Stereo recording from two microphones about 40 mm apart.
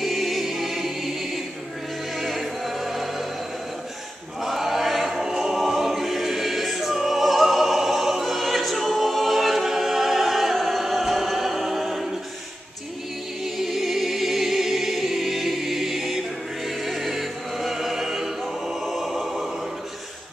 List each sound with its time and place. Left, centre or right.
0.0 s choir: centre
4.4 s choir: centre
13.4 s choir: centre
18.7 s music: centre